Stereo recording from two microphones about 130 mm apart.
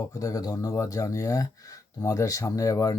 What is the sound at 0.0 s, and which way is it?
Speech, 25° left (ahead or behind).